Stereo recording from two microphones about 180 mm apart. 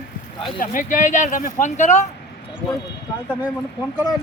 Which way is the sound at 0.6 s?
45° left (ahead or behind).